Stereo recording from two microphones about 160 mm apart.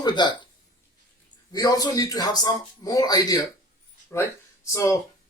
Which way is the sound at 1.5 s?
25° left (ahead or behind).